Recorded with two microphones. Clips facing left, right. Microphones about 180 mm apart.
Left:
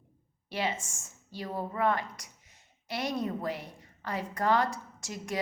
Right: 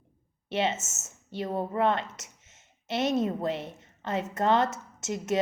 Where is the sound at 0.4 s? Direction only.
25° right (ahead or behind).